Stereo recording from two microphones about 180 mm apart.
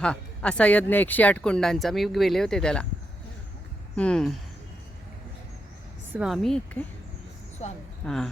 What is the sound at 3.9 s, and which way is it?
Speech, 5° left (ahead or behind).